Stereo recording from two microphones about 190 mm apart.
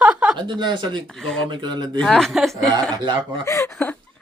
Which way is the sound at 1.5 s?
25° right (ahead or behind).